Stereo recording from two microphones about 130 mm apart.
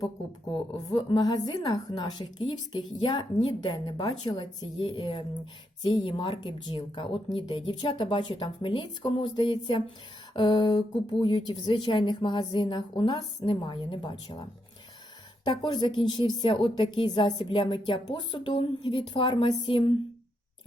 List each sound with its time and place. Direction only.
0.9 s a woman's voice: 30° left (ahead or behind)
15.4 s a woman's voice: 35° left (ahead or behind)